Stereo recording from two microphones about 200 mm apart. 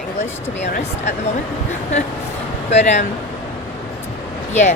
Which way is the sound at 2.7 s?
35° left (ahead or behind).